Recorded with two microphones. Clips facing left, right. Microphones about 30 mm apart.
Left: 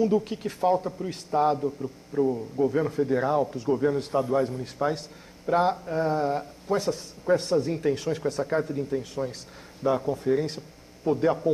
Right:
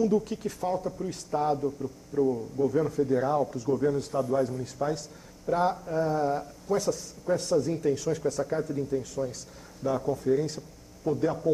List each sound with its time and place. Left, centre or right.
0.0 s speech: left
1.8 s a man's voice: centre
2.5 s speech: left